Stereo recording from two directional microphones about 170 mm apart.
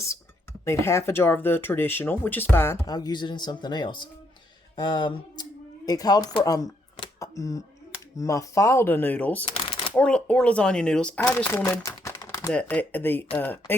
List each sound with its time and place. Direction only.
0.6 s speech: 15° left (ahead or behind)
12.5 s speech: 10° left (ahead or behind)